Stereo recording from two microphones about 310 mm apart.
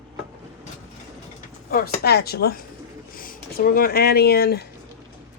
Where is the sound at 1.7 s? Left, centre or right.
Left.